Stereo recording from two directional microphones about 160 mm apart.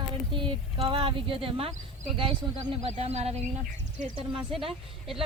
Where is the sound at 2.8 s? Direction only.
40° right (ahead or behind).